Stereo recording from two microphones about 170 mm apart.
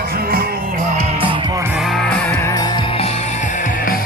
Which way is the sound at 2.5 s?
25° left (ahead or behind).